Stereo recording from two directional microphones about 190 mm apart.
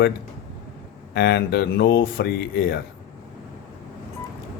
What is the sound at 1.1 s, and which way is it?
Speech, 60° left (ahead or behind).